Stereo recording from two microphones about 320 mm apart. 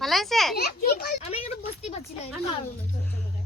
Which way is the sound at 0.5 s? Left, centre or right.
Left.